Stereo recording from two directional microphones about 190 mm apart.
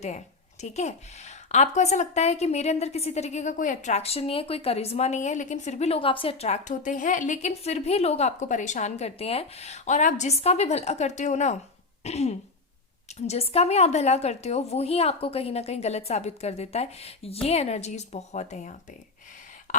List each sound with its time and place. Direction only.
0.6 s a woman's voice: 35° left (ahead or behind)